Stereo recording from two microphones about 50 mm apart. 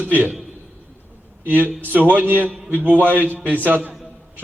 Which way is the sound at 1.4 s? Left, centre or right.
Right.